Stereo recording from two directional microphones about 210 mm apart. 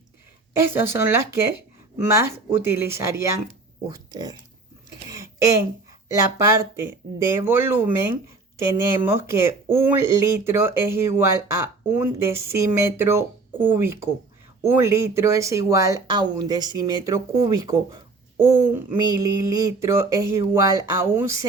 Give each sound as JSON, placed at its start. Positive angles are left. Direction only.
{"t": 0.6, "sound": "speech", "side_deg": -10}
{"t": 5.1, "sound": "a sound", "side_deg": -15}
{"t": 7.2, "sound": "speech", "side_deg": -15}